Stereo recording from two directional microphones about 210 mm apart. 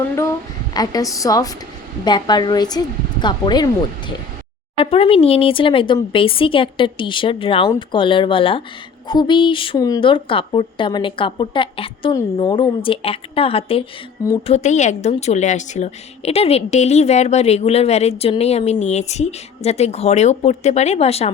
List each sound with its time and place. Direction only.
0.2 s a woman's voice: 15° left (ahead or behind)